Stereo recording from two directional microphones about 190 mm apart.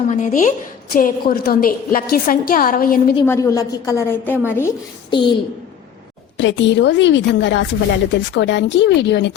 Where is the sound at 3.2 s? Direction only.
15° left (ahead or behind).